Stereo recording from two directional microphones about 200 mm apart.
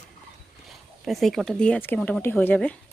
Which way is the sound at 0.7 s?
Centre (ahead or behind).